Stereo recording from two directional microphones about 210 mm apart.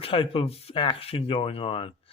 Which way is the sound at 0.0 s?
25° left (ahead or behind).